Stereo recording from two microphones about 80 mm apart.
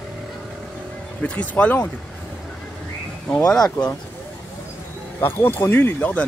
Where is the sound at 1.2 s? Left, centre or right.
Centre.